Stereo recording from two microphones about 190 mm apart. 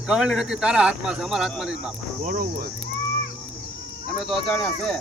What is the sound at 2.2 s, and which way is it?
Speech, 45° right (ahead or behind).